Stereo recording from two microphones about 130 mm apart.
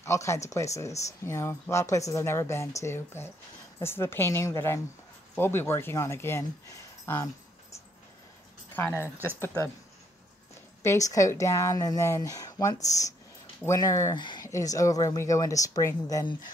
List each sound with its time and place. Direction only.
0.0 s speech: 20° left (ahead or behind)
8.9 s speech: 15° right (ahead or behind)
9.4 s speech: 15° left (ahead or behind)
10.8 s speech: 25° left (ahead or behind)